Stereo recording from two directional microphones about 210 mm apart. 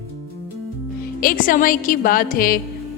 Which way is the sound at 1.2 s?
40° left (ahead or behind).